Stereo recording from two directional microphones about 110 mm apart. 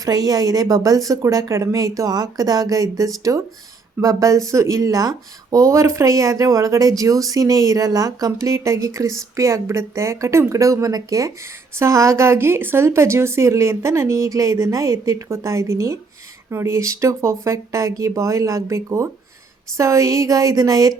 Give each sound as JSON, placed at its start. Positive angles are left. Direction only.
{"t": 0.0, "sound": "a woman's voice", "side_deg": -35}